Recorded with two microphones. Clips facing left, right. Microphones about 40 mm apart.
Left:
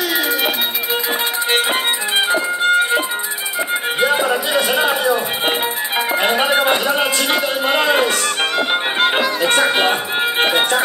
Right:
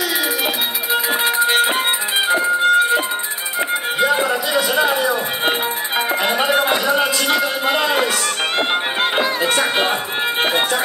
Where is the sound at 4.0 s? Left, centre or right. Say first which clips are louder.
Left 1 dB; left.